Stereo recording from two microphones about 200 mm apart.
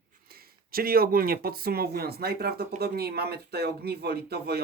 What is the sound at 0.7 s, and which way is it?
Speech, 50° right (ahead or behind).